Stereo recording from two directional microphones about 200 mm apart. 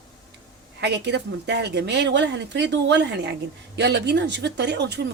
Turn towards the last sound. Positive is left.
turn(degrees=-60)  # may be behind; listen again after turning